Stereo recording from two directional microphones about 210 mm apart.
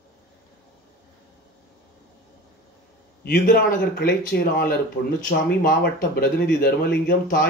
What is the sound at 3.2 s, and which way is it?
Speech, 45° left (ahead or behind).